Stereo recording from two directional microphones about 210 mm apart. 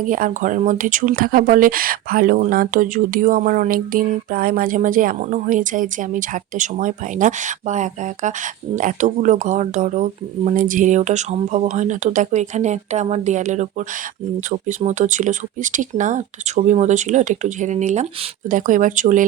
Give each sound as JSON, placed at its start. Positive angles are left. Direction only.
{"t": 0.0, "sound": "speech", "side_deg": -40}